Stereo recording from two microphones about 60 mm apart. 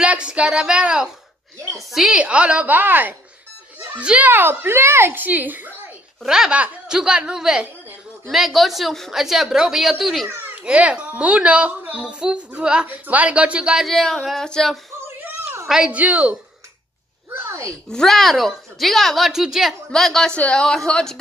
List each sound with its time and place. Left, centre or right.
0.0 s speech: centre
1.9 s a woman's voice: centre
2.1 s a woman's voice: centre
4.0 s a woman's voice: right
4.3 s speech: right
6.2 s speech: centre
8.3 s a woman's voice: centre
10.5 s a child's voice: right
13.8 s a woman's voice: centre
15.8 s a woman's voice: centre
17.8 s a woman's voice: centre
19.9 s a woman's voice: centre
20.2 s a woman's voice: centre